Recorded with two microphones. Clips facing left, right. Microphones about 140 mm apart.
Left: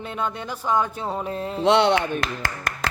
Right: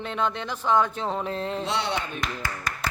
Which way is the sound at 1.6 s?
70° left (ahead or behind).